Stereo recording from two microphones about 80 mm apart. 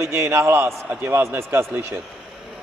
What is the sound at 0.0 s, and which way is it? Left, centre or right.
A man's voice, right.